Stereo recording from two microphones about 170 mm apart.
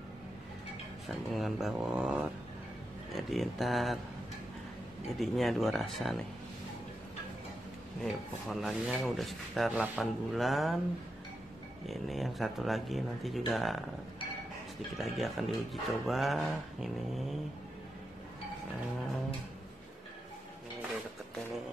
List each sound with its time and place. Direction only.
1.0 s speech: centre (ahead or behind)
5.2 s speech: centre (ahead or behind)
8.0 s speech: centre (ahead or behind)
11.8 s speech: centre (ahead or behind)
15.0 s speech: centre (ahead or behind)